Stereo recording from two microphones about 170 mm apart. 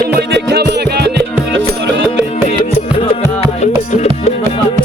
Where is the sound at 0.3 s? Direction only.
80° right.